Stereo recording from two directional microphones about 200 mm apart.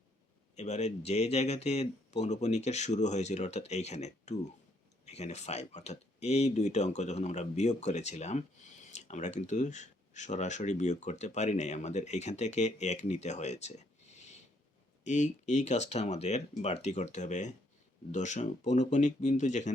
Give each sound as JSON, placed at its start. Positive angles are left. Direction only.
{"t": 0.5, "sound": "speech", "side_deg": 35}